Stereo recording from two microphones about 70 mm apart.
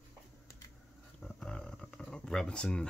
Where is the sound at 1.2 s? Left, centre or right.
Centre.